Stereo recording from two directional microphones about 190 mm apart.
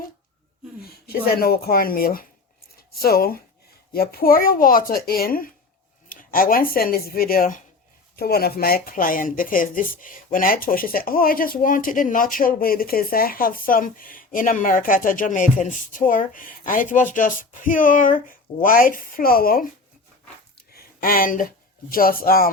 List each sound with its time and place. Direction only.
0.8 s speech: 55° left (ahead or behind)
20.7 s speech: 50° left (ahead or behind)